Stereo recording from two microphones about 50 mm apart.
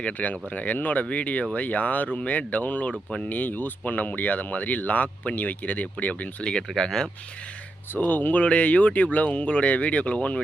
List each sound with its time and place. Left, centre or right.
0.0 s speech: left
6.4 s speech: centre
7.9 s speech: left